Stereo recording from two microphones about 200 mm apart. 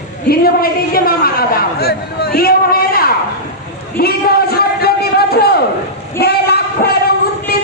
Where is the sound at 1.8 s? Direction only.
50° left (ahead or behind).